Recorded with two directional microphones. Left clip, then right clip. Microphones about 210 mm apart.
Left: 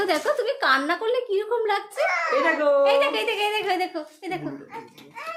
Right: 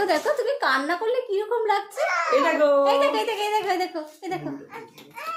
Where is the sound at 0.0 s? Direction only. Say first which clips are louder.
Right 1 dB; 5° left (ahead or behind).